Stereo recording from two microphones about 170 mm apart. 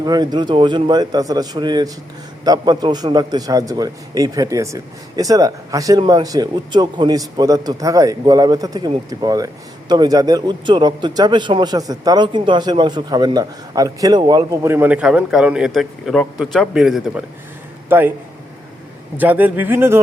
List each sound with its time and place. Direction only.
0.0 s a man's voice: 25° right (ahead or behind)
19.1 s speech: 10° right (ahead or behind)